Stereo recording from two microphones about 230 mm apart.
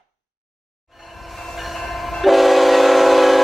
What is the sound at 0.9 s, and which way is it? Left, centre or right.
Train, centre.